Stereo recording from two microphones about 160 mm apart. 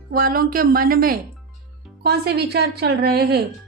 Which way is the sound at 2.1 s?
85° right.